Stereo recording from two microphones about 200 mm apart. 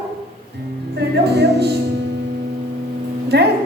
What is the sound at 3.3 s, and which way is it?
Music, 55° right (ahead or behind).